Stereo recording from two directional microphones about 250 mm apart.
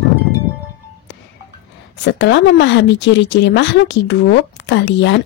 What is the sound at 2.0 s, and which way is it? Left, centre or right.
Speech, left.